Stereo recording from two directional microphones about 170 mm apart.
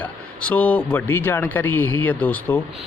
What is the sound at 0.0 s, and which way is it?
Speech, 10° left (ahead or behind).